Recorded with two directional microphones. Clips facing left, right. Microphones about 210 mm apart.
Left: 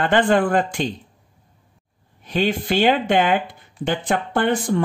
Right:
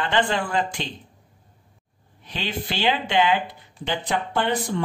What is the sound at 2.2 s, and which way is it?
Speech, 45° left (ahead or behind).